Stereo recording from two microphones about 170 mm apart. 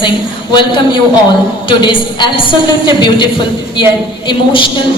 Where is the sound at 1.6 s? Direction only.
30° left (ahead or behind).